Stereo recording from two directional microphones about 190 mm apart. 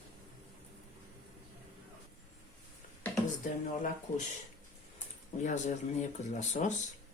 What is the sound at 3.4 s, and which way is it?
Speech, 45° left (ahead or behind).